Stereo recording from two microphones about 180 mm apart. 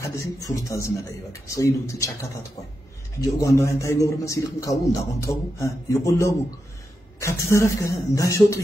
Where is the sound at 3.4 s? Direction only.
15° left (ahead or behind).